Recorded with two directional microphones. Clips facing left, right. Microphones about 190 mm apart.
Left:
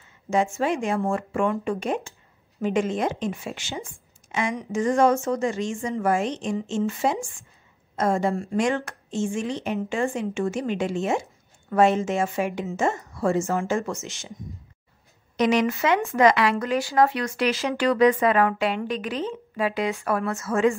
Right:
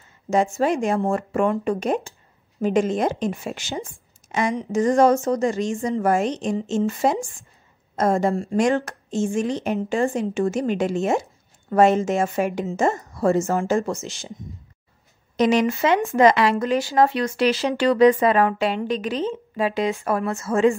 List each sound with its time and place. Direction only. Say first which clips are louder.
0.0 s a woman's voice: right 3 dB; 40° right (ahead or behind)
15.3 s speech: right 2 dB; 30° right (ahead or behind)